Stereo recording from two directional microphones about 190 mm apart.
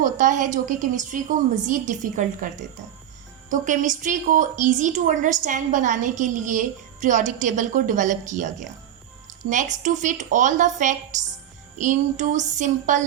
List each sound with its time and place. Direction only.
0.0 s a woman's voice: 45° right (ahead or behind)
3.5 s a woman's voice: 40° right (ahead or behind)